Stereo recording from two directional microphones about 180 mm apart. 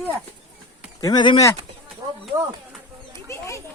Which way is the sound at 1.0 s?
25° left (ahead or behind).